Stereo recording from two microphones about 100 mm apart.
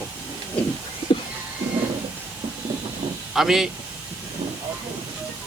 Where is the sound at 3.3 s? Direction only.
5° right (ahead or behind).